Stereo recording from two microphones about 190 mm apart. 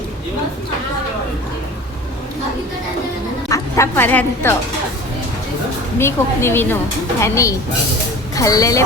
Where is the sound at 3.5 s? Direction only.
15° left (ahead or behind).